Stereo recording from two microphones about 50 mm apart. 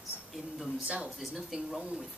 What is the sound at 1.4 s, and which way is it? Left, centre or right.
Speech, centre.